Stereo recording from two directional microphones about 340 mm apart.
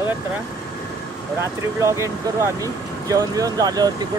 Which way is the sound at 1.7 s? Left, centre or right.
Centre.